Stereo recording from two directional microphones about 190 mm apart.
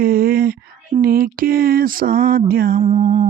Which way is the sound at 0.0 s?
50° right (ahead or behind).